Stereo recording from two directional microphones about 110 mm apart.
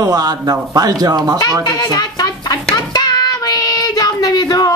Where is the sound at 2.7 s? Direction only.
35° left (ahead or behind).